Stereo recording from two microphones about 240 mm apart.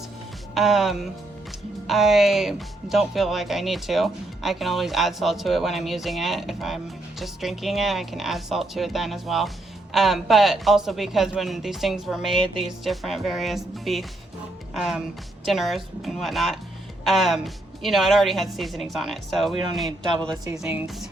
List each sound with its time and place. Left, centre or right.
0.5 s speech: centre
20.2 s speech: centre
20.6 s speech: centre